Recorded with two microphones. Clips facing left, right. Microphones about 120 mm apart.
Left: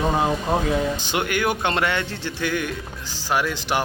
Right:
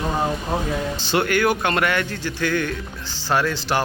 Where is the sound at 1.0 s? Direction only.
15° left (ahead or behind).